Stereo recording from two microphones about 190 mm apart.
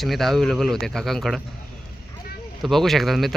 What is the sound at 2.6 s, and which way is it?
Speech, centre (ahead or behind).